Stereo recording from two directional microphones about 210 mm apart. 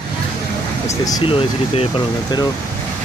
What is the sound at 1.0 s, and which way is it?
Speech, 20° left (ahead or behind).